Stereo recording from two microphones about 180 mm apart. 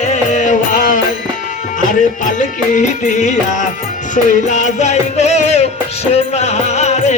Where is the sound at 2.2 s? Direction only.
45° left (ahead or behind).